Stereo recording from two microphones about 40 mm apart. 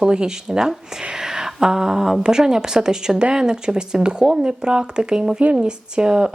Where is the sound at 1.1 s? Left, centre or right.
Centre.